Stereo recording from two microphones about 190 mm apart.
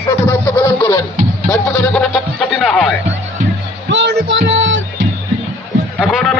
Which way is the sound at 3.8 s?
65° right (ahead or behind).